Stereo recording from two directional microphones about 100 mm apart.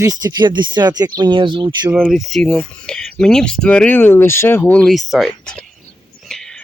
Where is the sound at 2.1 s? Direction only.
Centre (ahead or behind); by 4.7 s 20° left (ahead or behind).